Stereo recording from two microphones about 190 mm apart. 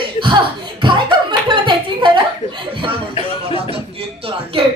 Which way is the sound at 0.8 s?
25° right (ahead or behind).